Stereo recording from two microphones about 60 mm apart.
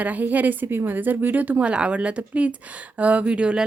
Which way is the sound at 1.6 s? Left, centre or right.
Centre.